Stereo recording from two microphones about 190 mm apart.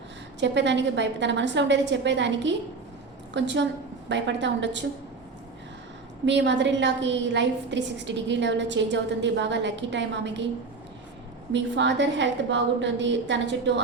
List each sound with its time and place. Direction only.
0.3 s a woman's voice: 70° right (ahead or behind)
6.2 s a woman's voice: 70° right (ahead or behind)
11.5 s a woman's voice: 70° right (ahead or behind)